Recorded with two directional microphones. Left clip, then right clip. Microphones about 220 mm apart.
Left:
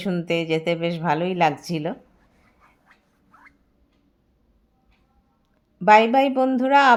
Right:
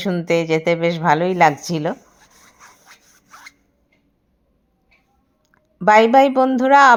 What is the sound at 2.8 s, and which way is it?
Sawing, 50° right (ahead or behind).